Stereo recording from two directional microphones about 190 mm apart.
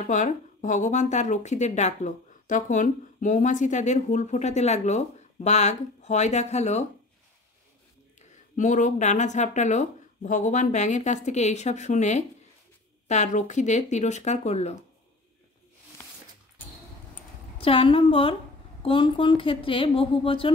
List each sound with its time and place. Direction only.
0.0 s speech: 40° left (ahead or behind)
8.5 s speech: 40° left (ahead or behind)
17.6 s speech: 30° left (ahead or behind)